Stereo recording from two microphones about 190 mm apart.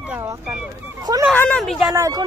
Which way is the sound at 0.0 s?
10° right (ahead or behind).